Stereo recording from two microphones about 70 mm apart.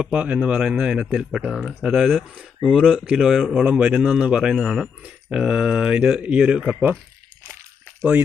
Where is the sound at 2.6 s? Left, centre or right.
Centre.